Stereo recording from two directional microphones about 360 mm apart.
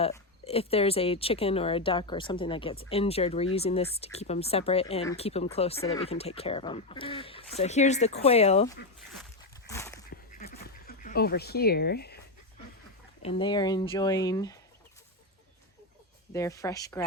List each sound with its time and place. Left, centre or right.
0.0 s speech: centre
9.6 s dog: centre
10.1 s duck: left
13.2 s speech: centre
16.3 s speech: centre